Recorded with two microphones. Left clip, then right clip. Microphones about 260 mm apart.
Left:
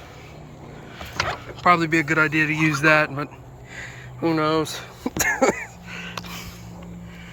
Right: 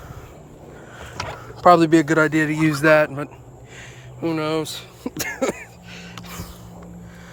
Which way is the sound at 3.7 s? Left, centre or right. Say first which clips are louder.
Left 5 dB; centre.